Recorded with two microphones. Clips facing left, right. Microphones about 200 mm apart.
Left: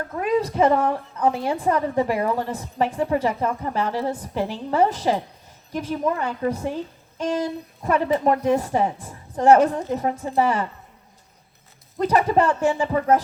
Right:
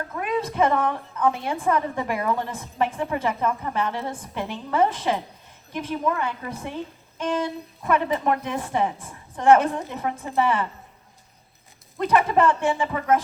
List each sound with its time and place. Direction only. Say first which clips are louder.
0.2 s a woman's voice: left 4 dB; 35° left (ahead or behind)
11.9 s a woman's voice: left 1 dB; 40° left (ahead or behind)